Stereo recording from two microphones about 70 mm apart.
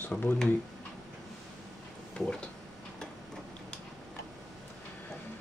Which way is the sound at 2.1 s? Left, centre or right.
Centre.